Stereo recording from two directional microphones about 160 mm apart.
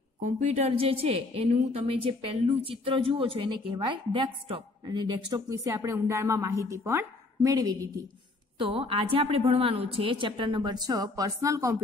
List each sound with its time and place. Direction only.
0.2 s a woman's voice: 45° right (ahead or behind); by 7.9 s 20° right (ahead or behind)
8.5 s a woman's voice: 35° right (ahead or behind)